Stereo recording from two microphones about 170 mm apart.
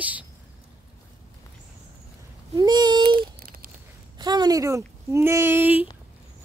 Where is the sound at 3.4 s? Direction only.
60° right (ahead or behind).